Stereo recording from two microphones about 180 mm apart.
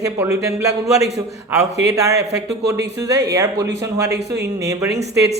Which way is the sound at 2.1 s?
65° right (ahead or behind).